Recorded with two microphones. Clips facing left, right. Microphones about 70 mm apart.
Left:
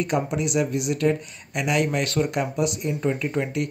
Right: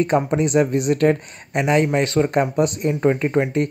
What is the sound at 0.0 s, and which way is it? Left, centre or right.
Speech, right.